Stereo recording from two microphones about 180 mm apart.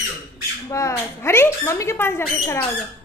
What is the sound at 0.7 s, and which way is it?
Speech, 15° left (ahead or behind).